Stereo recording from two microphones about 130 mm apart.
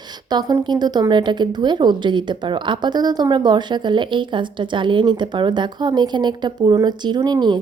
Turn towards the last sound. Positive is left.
turn(degrees=-35)  # may be behind; listen again after turning